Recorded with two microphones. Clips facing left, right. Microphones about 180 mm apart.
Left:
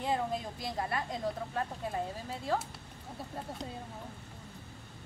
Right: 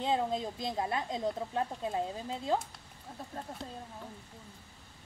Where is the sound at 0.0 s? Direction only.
20° right (ahead or behind).